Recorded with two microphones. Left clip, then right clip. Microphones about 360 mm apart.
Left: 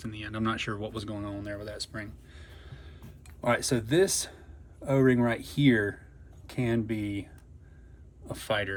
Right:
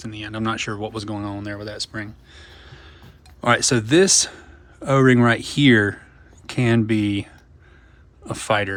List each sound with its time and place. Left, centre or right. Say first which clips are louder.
0.0 s speech: right 6 dB; centre
8.3 s speech: right 9 dB; centre